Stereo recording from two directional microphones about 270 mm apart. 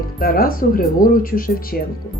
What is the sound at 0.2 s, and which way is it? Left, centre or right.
Speech, left.